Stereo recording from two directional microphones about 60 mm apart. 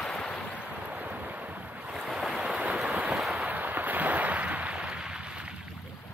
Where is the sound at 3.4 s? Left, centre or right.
Right.